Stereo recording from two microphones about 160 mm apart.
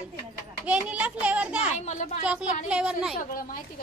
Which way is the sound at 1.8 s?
45° left (ahead or behind).